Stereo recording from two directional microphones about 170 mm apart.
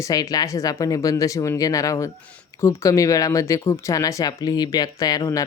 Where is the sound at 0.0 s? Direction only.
20° left (ahead or behind).